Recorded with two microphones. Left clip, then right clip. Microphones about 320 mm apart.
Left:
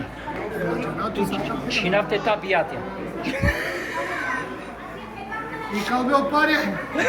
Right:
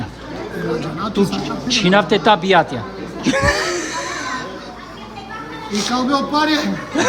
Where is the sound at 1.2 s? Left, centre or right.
Centre.